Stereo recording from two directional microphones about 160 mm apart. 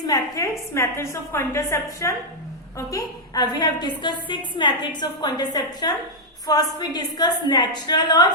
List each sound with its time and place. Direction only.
0.1 s a woman's voice: 20° left (ahead or behind)